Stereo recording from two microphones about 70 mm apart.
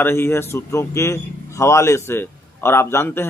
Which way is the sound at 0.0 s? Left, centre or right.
Left.